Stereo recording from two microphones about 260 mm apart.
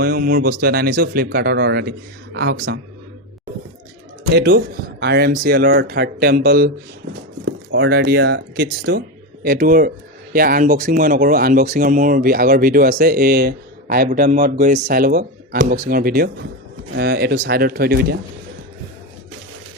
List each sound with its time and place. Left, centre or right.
0.0 s speech: right
4.3 s speech: right